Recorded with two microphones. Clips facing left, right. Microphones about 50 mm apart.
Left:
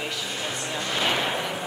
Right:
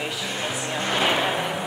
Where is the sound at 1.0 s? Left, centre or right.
Centre.